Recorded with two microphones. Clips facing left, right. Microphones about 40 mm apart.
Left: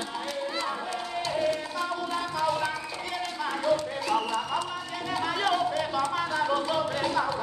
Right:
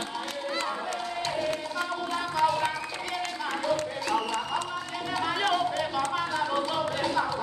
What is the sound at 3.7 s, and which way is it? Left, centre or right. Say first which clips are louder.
Music: left 2 dB; right.